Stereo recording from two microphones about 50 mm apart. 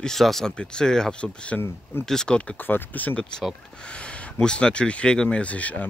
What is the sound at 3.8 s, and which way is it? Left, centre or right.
Speech, left.